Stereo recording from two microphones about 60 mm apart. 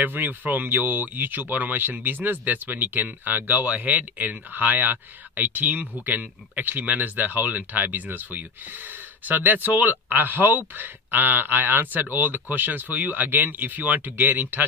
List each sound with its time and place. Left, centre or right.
0.0 s speech: right